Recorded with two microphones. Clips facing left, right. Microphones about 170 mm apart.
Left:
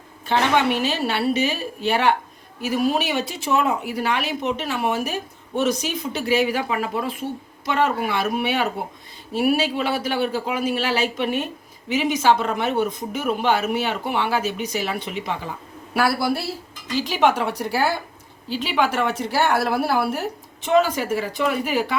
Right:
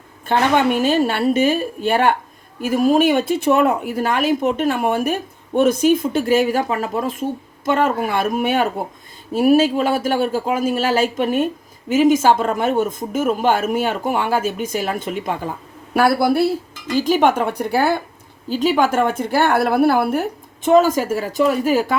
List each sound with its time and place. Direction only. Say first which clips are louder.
0.3 s speech: right 3 dB; 50° right (ahead or behind)
20.7 s speech: right 5 dB; 45° right (ahead or behind)